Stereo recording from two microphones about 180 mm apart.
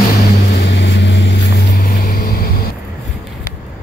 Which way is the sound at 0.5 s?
70° left (ahead or behind).